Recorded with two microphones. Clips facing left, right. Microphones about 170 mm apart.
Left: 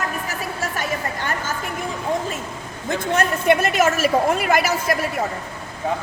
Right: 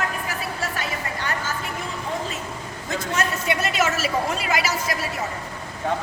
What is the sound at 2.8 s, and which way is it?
A woman's voice, 55° left (ahead or behind).